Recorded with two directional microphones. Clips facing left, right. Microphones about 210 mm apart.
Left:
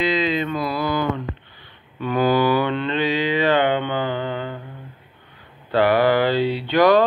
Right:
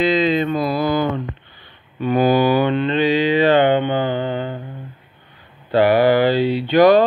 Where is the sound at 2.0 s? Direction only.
15° right (ahead or behind).